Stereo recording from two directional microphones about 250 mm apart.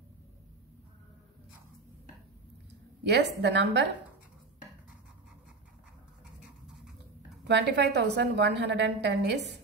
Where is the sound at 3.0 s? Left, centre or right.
Right.